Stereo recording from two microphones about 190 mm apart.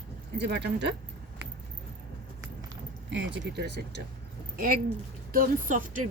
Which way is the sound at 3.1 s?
70° right (ahead or behind).